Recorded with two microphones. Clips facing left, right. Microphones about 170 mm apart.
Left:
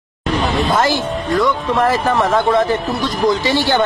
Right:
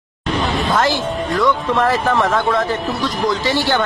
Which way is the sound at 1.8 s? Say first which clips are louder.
Left 3 dB; 5° left (ahead or behind).